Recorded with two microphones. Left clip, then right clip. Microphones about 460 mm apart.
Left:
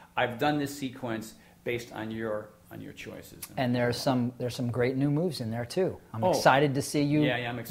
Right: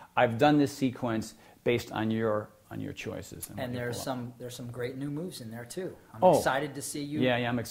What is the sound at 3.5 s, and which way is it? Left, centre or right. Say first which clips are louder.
Speech: left 7 dB; left.